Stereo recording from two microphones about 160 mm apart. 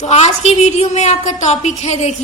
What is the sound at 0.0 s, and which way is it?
A woman's voice, 45° left (ahead or behind).